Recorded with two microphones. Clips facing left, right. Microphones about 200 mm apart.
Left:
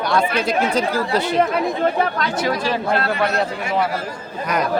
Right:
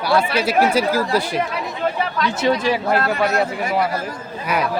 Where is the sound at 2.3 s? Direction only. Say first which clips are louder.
Right 2 dB; 25° right (ahead or behind).